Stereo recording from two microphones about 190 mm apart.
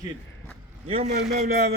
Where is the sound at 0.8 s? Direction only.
30° right (ahead or behind).